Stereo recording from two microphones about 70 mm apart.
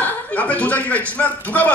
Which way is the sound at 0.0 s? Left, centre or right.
Left.